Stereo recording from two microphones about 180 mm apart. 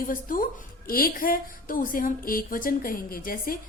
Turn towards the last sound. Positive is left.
turn(degrees=50)  # may be behind; listen again after turning